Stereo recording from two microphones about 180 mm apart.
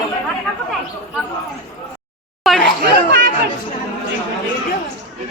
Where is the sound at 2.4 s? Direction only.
Centre (ahead or behind).